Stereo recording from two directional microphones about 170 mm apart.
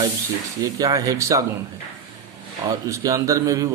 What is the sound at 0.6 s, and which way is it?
Speech, 20° right (ahead or behind).